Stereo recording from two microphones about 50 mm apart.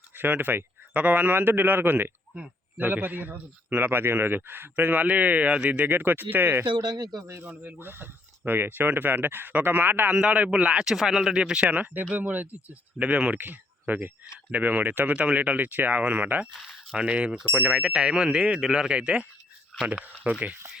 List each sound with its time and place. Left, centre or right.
0.2 s speech: right
5.9 s speech: right
7.4 s speech: right
7.8 s speech: right
10.1 s speech: right
10.8 s speech: centre
11.6 s speech: right
15.1 s speech: right
16.9 s speech: centre
17.5 s speech: right
17.7 s speech: centre
19.7 s speech: centre
20.3 s speech: right